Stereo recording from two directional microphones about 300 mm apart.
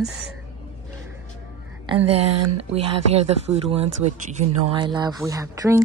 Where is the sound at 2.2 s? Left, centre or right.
Right.